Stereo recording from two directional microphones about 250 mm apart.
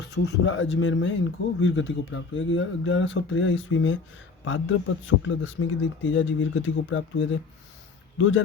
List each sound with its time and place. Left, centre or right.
0.1 s speech: left